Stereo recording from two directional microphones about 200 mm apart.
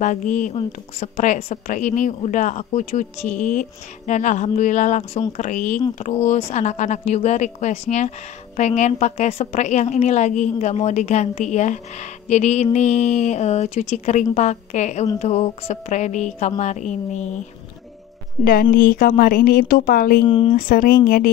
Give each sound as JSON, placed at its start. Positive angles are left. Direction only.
{"t": 0.0, "sound": "a woman's voice", "side_deg": 40}
{"t": 18.4, "sound": "speech", "side_deg": 45}
{"t": 20.2, "sound": "speech", "side_deg": 25}
{"t": 20.5, "sound": "speech", "side_deg": 45}